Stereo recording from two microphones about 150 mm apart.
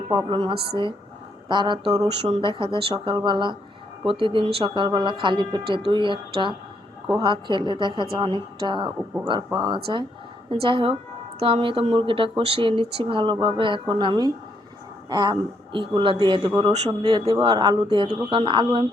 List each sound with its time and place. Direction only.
0.1 s speech: 30° right (ahead or behind)